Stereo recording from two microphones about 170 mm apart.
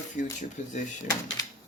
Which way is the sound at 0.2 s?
45° left (ahead or behind).